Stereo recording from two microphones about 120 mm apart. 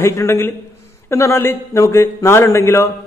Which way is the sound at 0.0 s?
20° left (ahead or behind).